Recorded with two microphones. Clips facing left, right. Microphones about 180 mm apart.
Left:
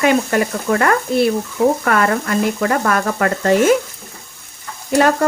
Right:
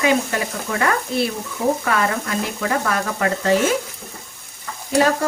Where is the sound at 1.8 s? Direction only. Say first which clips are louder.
Left 4 dB; 55° left (ahead or behind).